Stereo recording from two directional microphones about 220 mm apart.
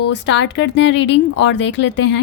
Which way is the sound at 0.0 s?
55° left (ahead or behind).